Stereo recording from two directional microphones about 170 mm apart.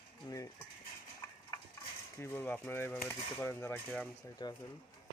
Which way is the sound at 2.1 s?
15° left (ahead or behind).